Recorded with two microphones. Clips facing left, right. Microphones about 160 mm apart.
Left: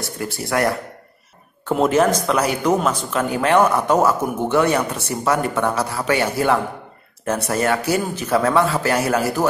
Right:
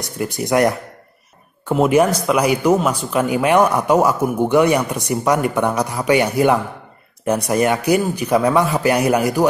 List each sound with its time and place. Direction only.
0.0 s speech: 15° right (ahead or behind)